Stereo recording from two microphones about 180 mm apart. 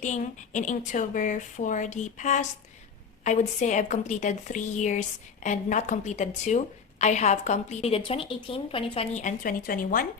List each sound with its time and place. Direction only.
0.0 s a woman's voice: 45° left (ahead or behind)